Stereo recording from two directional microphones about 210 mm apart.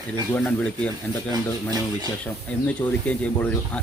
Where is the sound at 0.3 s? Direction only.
5° left (ahead or behind).